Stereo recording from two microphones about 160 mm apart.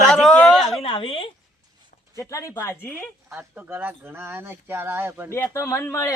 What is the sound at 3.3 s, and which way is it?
Speech, 10° right (ahead or behind).